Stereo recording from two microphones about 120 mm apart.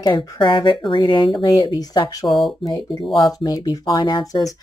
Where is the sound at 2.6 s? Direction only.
35° left (ahead or behind).